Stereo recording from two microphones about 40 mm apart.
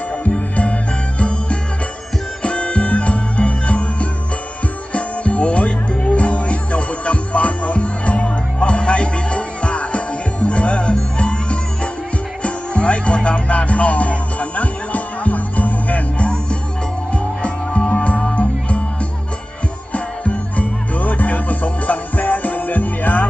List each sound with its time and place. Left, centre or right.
0.1 s music: left
19.9 s music: left